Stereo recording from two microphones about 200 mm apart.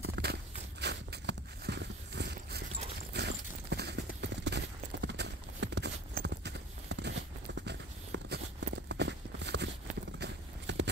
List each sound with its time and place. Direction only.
0.0 s horse: 55° right (ahead or behind)
3.1 s clip-clop: 55° right (ahead or behind)